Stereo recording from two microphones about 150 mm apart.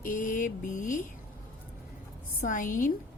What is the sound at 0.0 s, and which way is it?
A woman's voice, 65° left (ahead or behind).